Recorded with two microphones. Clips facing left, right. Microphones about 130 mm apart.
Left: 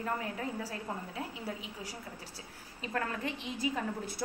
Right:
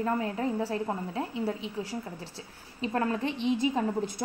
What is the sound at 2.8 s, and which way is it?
A woman's voice, 25° right (ahead or behind).